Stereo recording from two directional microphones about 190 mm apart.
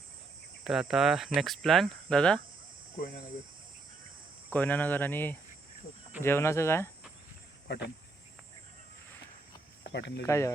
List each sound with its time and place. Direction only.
0.6 s speech: centre (ahead or behind)
4.5 s speech: 10° left (ahead or behind)
7.7 s speech: 60° left (ahead or behind)
9.8 s speech: 60° left (ahead or behind)
10.2 s speech: 15° left (ahead or behind)